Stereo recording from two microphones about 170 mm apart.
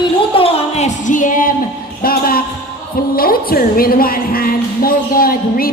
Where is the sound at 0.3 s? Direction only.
40° left (ahead or behind); by 2.4 s 60° left (ahead or behind).